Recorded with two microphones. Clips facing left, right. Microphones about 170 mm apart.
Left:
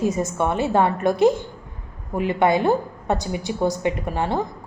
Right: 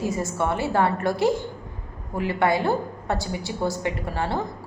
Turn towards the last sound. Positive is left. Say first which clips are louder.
# left 3 dB
turn(degrees=15)  # may be behind; listen again after turning